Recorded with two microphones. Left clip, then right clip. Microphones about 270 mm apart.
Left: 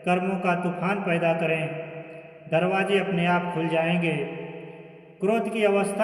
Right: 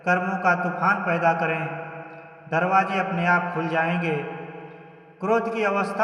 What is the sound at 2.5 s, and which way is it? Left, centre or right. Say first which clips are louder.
Speech: right 2 dB; centre.